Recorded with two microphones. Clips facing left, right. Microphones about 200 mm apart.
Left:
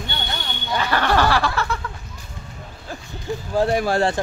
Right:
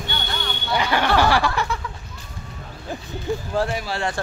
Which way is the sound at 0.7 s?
15° right (ahead or behind).